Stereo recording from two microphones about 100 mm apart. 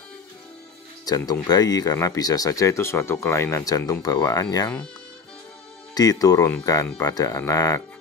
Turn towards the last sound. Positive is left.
turn(degrees=35)  # may be behind; listen again after turning